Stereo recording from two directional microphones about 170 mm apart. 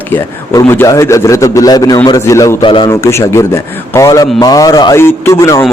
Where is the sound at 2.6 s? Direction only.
30° left (ahead or behind).